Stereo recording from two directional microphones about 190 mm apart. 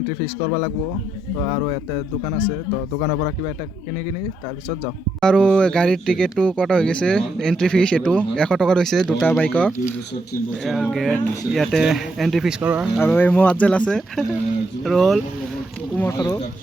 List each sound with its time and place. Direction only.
5.2 s speech: 5° left (ahead or behind)
13.0 s speech: 10° left (ahead or behind)
16.0 s speech: 15° left (ahead or behind)